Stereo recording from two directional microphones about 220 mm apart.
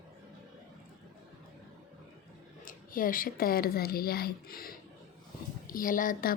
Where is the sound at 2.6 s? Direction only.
40° left (ahead or behind).